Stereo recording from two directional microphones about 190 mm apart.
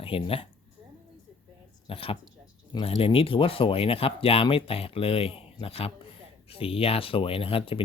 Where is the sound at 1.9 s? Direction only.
30° left (ahead or behind).